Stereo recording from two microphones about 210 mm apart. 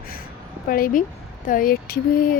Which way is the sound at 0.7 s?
40° left (ahead or behind).